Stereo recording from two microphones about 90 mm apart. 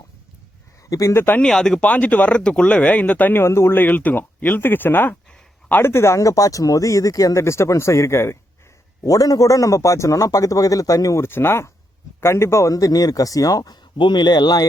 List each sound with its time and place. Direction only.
0.9 s speech: 35° left (ahead or behind)
1.4 s speech: 5° left (ahead or behind); by 8.4 s 30° left (ahead or behind)
9.0 s speech: 40° left (ahead or behind)
14.0 s speech: 55° left (ahead or behind)